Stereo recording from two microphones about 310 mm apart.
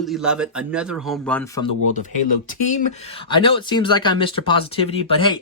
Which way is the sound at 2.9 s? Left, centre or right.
Centre.